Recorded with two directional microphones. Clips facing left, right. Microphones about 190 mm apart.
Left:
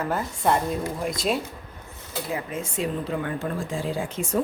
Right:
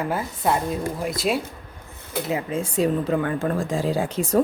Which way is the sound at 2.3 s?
25° right (ahead or behind).